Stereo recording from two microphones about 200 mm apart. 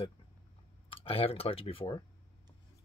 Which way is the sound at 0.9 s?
30° left (ahead or behind).